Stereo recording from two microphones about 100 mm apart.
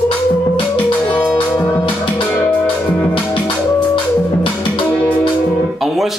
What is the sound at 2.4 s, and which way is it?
Music, 15° left (ahead or behind).